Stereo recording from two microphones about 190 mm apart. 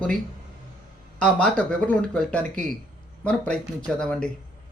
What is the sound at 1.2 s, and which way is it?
Speech, 5° left (ahead or behind).